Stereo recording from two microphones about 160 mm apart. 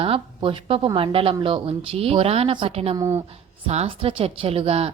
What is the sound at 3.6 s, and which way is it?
Speech, 40° right (ahead or behind).